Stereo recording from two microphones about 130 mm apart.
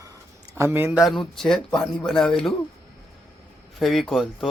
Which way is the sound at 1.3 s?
5° left (ahead or behind).